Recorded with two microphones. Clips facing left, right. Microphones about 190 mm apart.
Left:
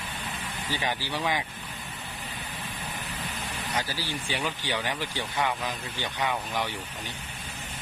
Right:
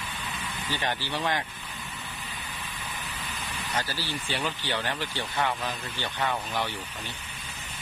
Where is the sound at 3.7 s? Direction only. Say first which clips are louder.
Even; 10° left (ahead or behind).